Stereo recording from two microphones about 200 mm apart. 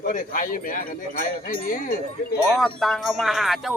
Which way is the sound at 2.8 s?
Centre (ahead or behind).